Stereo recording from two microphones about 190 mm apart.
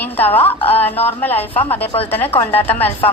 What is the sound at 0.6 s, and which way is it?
Speech, 30° left (ahead or behind).